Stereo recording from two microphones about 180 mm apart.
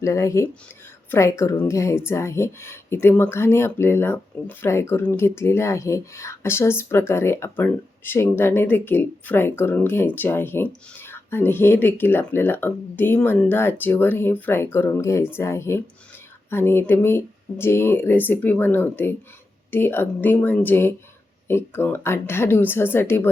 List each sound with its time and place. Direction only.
0.0 s speech: 15° left (ahead or behind)